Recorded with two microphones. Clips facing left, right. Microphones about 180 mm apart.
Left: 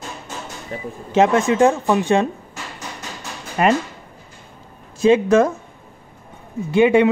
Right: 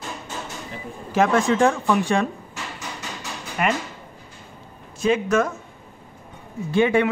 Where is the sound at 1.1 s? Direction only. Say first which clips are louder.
Left 3 dB; 20° left (ahead or behind).